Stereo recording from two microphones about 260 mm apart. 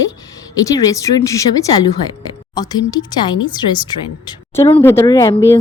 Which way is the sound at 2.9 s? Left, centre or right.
Centre.